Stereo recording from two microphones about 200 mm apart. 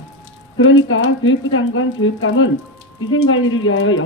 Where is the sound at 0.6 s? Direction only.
80° left.